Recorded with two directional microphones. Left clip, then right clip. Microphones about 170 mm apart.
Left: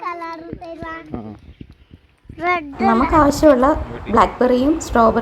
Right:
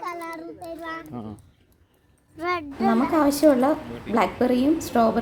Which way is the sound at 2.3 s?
40° left (ahead or behind).